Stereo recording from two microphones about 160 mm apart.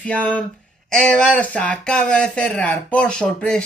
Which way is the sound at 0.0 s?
10° left (ahead or behind).